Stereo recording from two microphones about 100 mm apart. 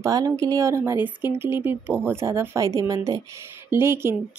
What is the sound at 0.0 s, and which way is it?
Speech, 35° right (ahead or behind).